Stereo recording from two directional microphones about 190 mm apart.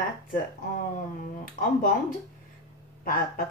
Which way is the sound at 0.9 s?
45° left (ahead or behind).